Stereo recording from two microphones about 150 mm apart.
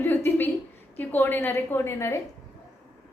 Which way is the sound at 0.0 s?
15° left (ahead or behind).